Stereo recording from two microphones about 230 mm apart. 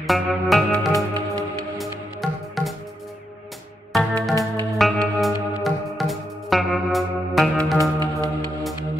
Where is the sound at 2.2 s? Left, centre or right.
Centre.